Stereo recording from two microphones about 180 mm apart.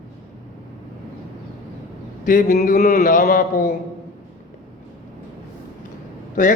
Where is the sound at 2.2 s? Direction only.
45° left (ahead or behind).